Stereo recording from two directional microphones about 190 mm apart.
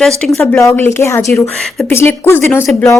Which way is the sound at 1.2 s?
Centre (ahead or behind).